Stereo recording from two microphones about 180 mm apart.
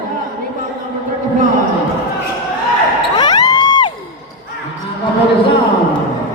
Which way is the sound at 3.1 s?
25° left (ahead or behind).